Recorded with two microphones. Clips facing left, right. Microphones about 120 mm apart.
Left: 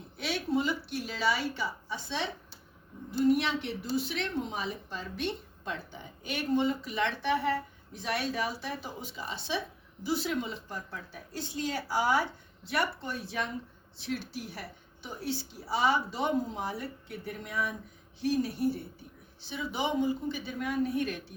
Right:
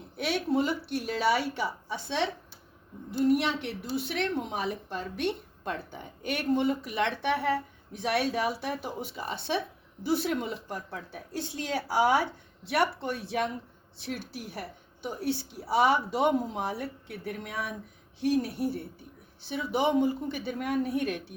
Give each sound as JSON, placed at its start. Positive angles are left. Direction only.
{"t": 0.2, "sound": "a woman's voice", "side_deg": -60}
{"t": 15.7, "sound": "a woman's voice", "side_deg": -60}